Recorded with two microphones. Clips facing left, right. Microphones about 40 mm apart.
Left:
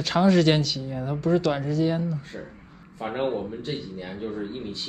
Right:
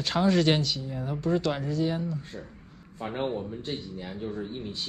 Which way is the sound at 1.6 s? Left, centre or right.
Centre.